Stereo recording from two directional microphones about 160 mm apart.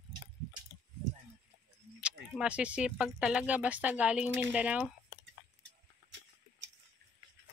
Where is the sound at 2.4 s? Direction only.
5° right (ahead or behind).